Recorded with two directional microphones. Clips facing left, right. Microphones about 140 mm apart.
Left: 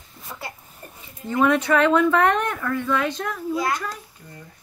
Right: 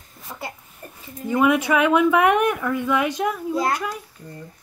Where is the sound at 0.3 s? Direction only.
15° right (ahead or behind).